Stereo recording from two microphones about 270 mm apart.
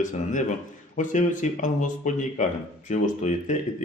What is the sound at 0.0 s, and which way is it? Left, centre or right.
A man's voice, left.